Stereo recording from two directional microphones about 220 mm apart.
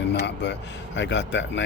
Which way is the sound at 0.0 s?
50° left (ahead or behind).